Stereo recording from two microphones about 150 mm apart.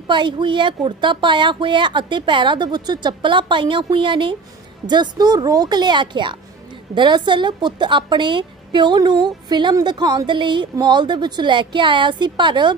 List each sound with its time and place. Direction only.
0.0 s a woman's voice: 30° right (ahead or behind)